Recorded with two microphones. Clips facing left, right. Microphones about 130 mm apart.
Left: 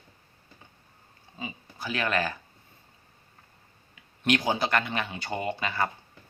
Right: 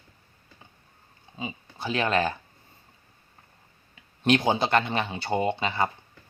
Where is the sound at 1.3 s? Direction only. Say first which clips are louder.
Right 3 dB; 25° right (ahead or behind).